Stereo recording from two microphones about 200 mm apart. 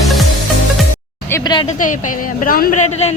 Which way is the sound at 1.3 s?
20° left (ahead or behind).